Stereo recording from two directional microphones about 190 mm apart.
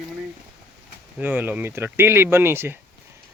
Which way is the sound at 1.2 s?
10° right (ahead or behind).